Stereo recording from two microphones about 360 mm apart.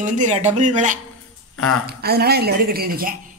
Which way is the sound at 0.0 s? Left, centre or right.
Centre.